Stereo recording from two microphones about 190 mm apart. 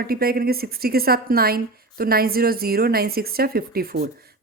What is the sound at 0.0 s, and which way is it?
A woman's voice, 55° right (ahead or behind).